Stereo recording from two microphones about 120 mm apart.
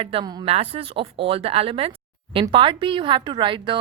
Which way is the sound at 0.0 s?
50° right (ahead or behind).